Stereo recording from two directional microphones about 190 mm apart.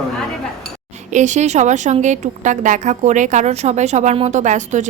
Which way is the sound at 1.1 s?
40° right (ahead or behind).